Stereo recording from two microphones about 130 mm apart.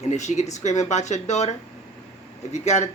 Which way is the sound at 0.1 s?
65° left (ahead or behind).